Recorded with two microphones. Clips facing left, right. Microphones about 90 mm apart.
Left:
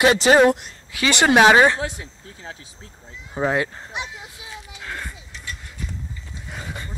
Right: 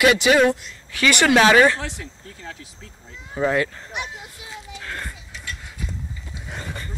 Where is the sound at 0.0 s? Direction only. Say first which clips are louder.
Left 2 dB; 35° left (ahead or behind).